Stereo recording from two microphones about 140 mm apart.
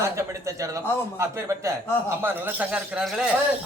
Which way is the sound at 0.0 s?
20° right (ahead or behind).